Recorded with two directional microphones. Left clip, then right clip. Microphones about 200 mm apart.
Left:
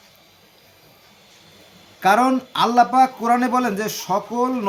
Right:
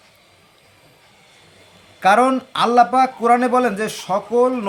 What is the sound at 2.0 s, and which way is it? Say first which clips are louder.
Speech: right 2 dB; 25° right (ahead or behind).